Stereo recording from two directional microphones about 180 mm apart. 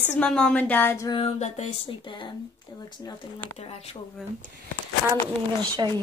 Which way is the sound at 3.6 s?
35° left (ahead or behind).